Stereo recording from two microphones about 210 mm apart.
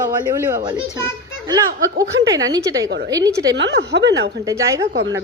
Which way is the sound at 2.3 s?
15° right (ahead or behind).